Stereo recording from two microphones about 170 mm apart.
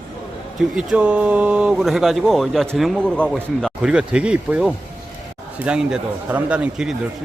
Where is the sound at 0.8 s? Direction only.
5° right (ahead or behind).